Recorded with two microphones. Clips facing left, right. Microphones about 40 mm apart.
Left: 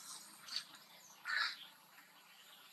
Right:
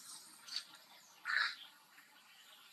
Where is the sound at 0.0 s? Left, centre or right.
Left.